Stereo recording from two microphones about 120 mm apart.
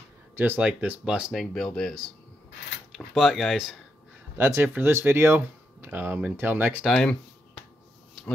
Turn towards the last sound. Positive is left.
turn(degrees=5)  # may be behind; listen again after turning